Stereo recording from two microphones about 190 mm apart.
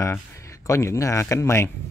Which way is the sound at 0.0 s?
15° left (ahead or behind).